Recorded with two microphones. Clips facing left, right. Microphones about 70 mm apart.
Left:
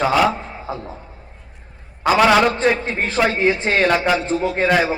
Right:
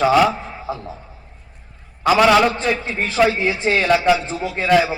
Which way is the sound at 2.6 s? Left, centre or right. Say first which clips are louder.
Left 3 dB; left.